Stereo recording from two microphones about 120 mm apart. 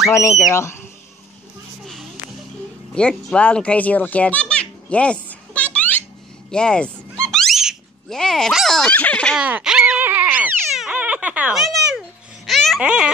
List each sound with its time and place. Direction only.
0.1 s speech: 25° left (ahead or behind)
2.9 s children playing: 5° left (ahead or behind)
6.5 s speech: 10° left (ahead or behind)
9.4 s a sound: 10° right (ahead or behind)